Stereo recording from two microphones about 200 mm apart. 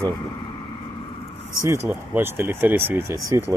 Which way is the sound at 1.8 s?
10° right (ahead or behind).